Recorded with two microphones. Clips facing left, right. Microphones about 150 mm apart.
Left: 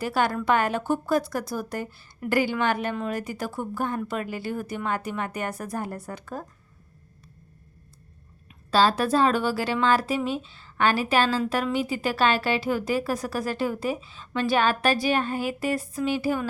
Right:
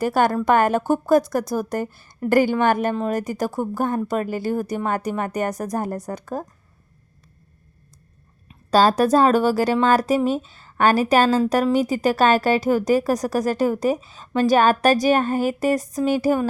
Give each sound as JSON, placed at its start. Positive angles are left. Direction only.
{"t": 0.0, "sound": "speech", "side_deg": -45}
{"t": 8.7, "sound": "speech", "side_deg": -45}